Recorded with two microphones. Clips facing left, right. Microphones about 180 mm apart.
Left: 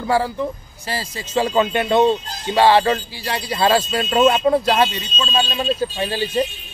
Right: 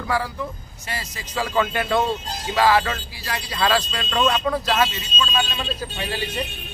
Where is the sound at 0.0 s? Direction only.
30° left (ahead or behind).